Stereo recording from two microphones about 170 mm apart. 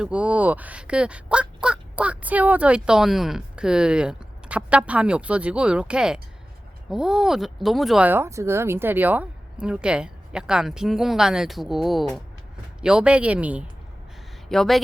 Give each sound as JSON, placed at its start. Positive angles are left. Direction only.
{"t": 0.0, "sound": "speech", "side_deg": -5}
{"t": 14.5, "sound": "speech", "side_deg": 0}